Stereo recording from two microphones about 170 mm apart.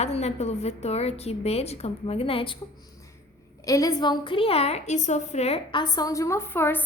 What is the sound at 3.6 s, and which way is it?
A woman's voice, 20° left (ahead or behind).